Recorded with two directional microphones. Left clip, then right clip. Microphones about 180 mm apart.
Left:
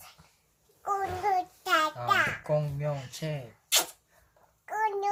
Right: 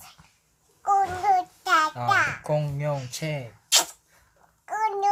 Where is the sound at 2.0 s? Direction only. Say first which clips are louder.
Right 4 dB; 5° left (ahead or behind).